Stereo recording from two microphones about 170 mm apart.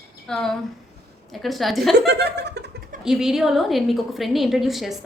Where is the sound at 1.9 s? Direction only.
75° right (ahead or behind).